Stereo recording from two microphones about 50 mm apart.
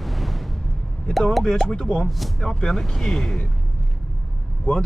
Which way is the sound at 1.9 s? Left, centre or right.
Centre.